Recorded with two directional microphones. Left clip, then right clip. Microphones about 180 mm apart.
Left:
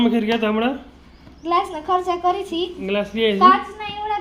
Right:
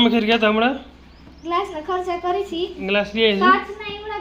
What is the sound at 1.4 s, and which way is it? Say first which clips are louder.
A child's voice: left 3 dB; 55° left (ahead or behind).